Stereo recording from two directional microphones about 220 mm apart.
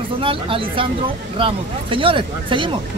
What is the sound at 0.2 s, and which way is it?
Speech, 25° right (ahead or behind).